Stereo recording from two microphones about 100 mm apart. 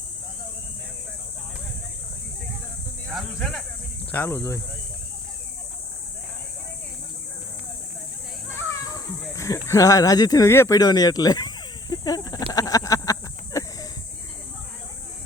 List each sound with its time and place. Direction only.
4.1 s speech: 20° left (ahead or behind)
9.3 s a sound: 30° left (ahead or behind)
9.6 s speech: 35° left (ahead or behind)
10.5 s speech: 25° left (ahead or behind)
10.8 s snake: 40° left (ahead or behind)